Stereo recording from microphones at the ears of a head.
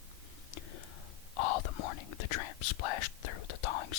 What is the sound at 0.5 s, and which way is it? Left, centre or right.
Whispering, left.